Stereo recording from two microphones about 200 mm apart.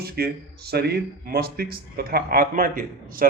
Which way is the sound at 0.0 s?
50° right (ahead or behind).